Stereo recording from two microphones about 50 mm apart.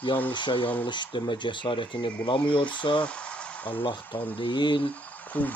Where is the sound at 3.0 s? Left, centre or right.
Left.